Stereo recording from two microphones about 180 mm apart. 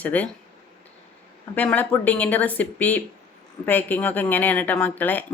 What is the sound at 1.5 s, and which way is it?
Speech, 10° left (ahead or behind).